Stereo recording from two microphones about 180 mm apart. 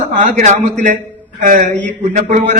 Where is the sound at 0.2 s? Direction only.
45° right (ahead or behind).